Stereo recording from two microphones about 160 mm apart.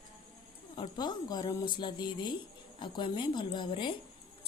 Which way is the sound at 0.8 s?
25° left (ahead or behind).